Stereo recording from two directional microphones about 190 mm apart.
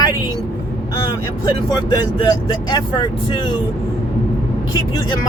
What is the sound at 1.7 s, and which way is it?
Speech, 20° left (ahead or behind).